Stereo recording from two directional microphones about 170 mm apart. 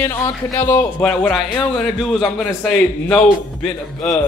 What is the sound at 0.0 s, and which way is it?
A man's voice, 15° left (ahead or behind).